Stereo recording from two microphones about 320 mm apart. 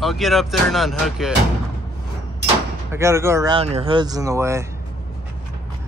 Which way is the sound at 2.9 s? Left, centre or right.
Centre.